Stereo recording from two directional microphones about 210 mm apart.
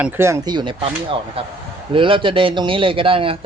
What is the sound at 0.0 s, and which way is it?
A man's voice, 10° right (ahead or behind).